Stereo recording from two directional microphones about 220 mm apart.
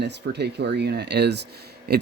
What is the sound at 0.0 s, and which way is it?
Speech, 50° right (ahead or behind).